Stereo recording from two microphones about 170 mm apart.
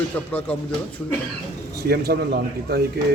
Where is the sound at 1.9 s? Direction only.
70° right (ahead or behind).